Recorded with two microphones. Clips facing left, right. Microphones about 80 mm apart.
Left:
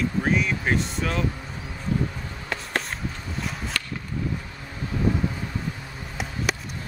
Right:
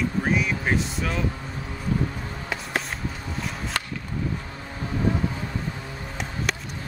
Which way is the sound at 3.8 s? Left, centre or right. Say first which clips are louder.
Right 2 dB; right.